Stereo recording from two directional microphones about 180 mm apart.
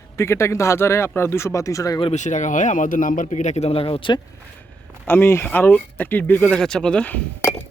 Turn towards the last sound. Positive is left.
turn(degrees=10)  # may be behind; listen again after turning